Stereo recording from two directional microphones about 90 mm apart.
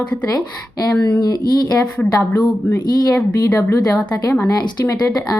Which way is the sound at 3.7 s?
45° left (ahead or behind).